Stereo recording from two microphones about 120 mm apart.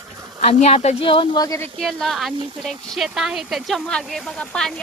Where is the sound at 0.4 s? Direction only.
60° left (ahead or behind); by 1.5 s 45° left (ahead or behind).